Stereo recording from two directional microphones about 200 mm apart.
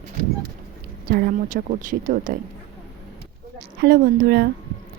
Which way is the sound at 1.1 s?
45° right (ahead or behind).